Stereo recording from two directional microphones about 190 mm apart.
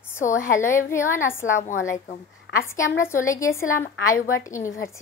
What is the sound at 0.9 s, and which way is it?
Speech, 15° left (ahead or behind).